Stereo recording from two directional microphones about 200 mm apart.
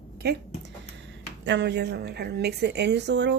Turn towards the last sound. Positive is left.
turn(degrees=-60)  # may be behind; listen again after turning